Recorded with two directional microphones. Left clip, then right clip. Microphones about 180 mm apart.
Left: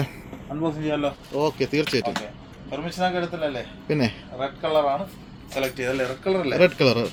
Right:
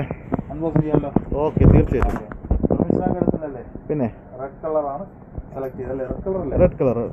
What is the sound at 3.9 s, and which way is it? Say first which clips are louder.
Speech: even; 20° left (ahead or behind).